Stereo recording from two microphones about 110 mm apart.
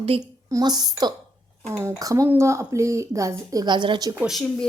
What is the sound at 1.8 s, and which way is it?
A woman's voice, 30° right (ahead or behind).